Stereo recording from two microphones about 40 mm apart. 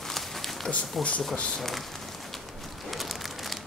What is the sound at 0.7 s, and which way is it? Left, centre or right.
Speech, left.